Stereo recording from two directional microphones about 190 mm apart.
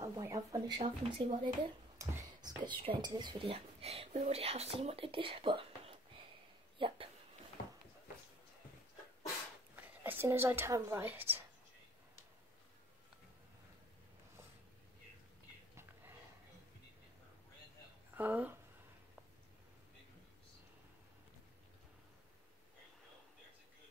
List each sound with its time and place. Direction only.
0.0 s speech: 15° right (ahead or behind)
9.8 s a woman's voice: 10° right (ahead or behind)
15.7 s a sound: 10° right (ahead or behind)
18.1 s speech: 10° right (ahead or behind)